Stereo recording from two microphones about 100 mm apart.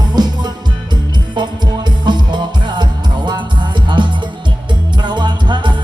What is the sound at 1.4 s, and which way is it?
Music, 50° right (ahead or behind).